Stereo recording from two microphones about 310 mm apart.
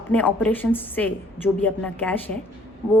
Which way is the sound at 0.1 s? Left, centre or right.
Centre.